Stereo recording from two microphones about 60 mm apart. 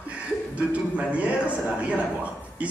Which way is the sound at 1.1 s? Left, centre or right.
Right.